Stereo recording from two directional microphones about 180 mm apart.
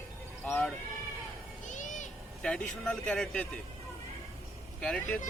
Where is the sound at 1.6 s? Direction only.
45° left (ahead or behind).